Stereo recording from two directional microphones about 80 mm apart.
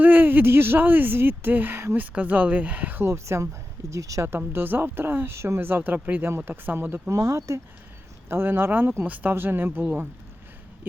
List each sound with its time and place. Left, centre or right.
0.0 s speech: right
3.0 s speech: right
4.3 s speech: right
7.1 s speech: right
8.3 s speech: right